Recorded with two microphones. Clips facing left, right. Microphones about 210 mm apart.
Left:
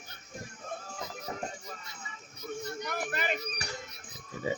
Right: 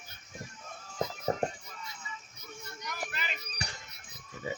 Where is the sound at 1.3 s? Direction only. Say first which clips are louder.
Right 8 dB; 45° right (ahead or behind).